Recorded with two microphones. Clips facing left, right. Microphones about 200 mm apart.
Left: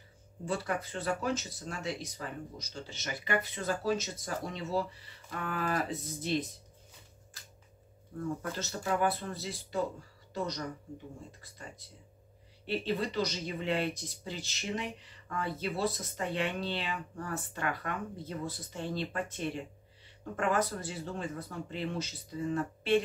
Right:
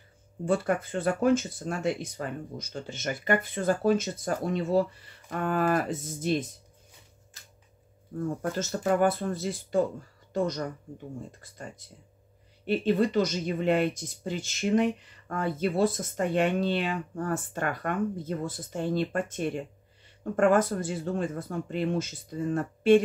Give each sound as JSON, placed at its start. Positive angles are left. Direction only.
{"t": 0.5, "sound": "speech", "side_deg": -50}
{"t": 8.4, "sound": "speech", "side_deg": -45}
{"t": 12.6, "sound": "speech", "side_deg": -50}